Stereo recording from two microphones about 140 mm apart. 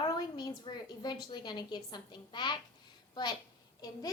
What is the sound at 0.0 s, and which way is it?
A woman's voice, 30° left (ahead or behind).